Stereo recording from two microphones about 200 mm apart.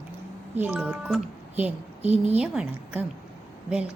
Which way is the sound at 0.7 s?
5° right (ahead or behind).